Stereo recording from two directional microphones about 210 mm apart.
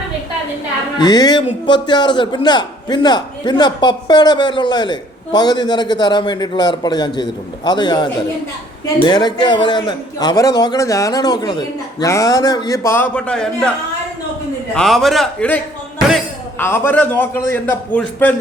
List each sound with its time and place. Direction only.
0.9 s a man's voice: 20° left (ahead or behind); by 13.7 s 5° left (ahead or behind)
14.8 s a man's voice: centre (ahead or behind)